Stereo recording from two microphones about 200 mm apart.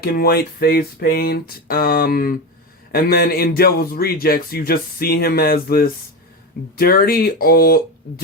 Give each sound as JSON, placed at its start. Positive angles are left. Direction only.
{"t": 0.0, "sound": "a man's voice", "side_deg": 50}